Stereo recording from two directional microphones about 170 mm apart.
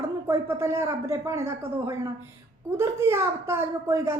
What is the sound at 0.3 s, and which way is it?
A woman's voice, 15° right (ahead or behind).